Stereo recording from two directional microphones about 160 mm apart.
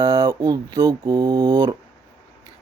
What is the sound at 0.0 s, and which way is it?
Speech, 25° right (ahead or behind).